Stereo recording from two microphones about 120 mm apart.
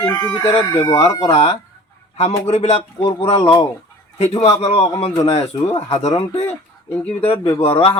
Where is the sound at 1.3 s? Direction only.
55° left (ahead or behind).